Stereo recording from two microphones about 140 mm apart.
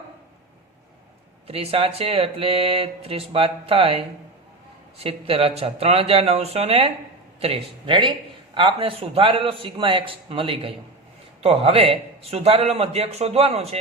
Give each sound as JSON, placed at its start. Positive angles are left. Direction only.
{"t": 1.5, "sound": "a man's voice", "side_deg": -45}